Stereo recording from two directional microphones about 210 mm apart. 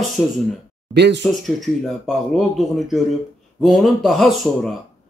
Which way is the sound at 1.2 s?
Centre (ahead or behind).